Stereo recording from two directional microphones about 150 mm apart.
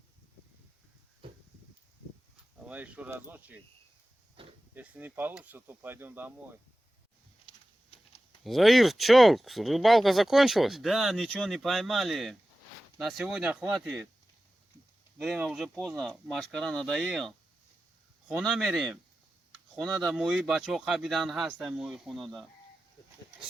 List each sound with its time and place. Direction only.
1.2 s a sound: 35° right (ahead or behind)
2.6 s speech: 10° right (ahead or behind)
4.4 s pig: 35° right (ahead or behind)
4.7 s speech: 10° right (ahead or behind)
8.4 s speech: centre (ahead or behind)
15.2 s speech: centre (ahead or behind)